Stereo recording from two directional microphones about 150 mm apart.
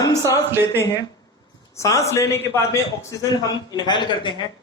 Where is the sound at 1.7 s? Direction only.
20° left (ahead or behind).